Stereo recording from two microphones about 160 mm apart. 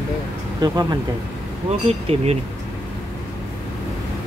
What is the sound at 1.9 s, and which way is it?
Speech, 40° right (ahead or behind).